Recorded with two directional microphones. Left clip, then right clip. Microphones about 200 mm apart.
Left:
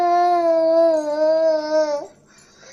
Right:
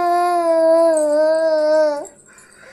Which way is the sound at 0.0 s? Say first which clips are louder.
Even; 25° right (ahead or behind).